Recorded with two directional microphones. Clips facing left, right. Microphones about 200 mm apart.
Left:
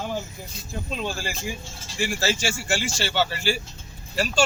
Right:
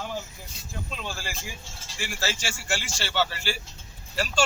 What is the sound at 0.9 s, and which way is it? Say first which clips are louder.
Speech: left 7 dB; 20° left (ahead or behind).